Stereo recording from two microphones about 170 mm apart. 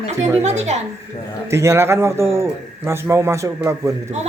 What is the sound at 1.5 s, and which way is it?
Speech, 15° right (ahead or behind).